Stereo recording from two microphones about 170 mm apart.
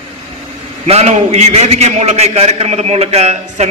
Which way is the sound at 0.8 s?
40° right (ahead or behind).